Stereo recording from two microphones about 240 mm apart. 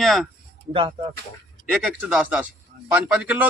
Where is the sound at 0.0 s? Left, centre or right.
Centre.